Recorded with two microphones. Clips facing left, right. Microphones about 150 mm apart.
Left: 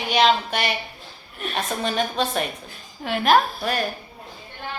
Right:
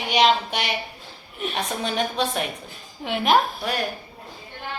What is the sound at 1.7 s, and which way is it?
A woman's voice, 15° right (ahead or behind).